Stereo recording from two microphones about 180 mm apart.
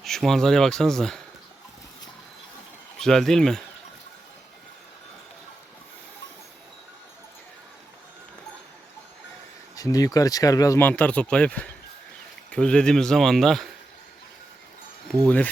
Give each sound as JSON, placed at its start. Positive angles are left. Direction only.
{"t": 0.0, "sound": "speech", "side_deg": 0}
{"t": 3.0, "sound": "speech", "side_deg": 0}
{"t": 9.7, "sound": "speech", "side_deg": 20}